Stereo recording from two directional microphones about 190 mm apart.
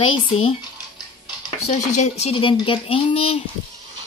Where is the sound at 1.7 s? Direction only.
40° left (ahead or behind).